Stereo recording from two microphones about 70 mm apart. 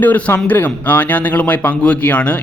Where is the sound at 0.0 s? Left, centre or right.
Left.